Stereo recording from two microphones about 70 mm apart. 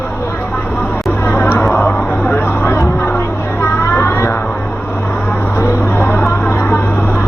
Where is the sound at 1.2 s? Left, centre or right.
Left.